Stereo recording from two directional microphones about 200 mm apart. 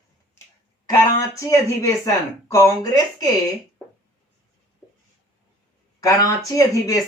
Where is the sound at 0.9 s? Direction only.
15° left (ahead or behind).